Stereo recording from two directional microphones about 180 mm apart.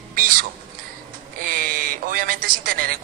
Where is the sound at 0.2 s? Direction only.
50° right (ahead or behind).